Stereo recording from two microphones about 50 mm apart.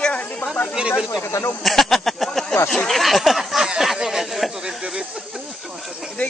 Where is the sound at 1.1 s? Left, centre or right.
Left.